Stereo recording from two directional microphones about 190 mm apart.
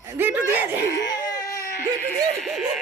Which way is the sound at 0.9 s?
20° left (ahead or behind).